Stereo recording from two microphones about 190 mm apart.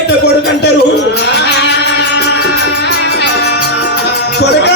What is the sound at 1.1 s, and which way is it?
Music, 60° left (ahead or behind).